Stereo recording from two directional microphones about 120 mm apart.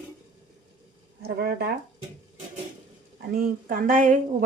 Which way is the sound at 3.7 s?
90° right.